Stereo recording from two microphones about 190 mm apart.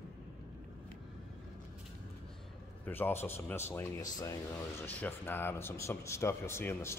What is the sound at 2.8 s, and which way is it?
Speech, 10° left (ahead or behind).